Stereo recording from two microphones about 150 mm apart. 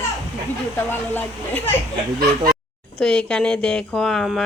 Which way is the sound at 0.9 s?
10° left (ahead or behind).